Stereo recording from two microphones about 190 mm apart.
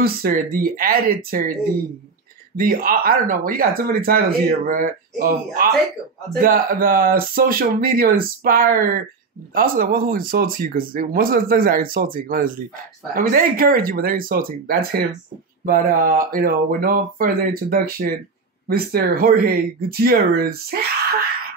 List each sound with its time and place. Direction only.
0.0 s speech: 50° right (ahead or behind)